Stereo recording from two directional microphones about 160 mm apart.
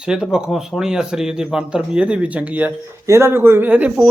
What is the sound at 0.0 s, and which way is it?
Speech, 5° right (ahead or behind).